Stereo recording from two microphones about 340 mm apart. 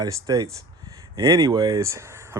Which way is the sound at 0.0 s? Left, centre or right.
Centre.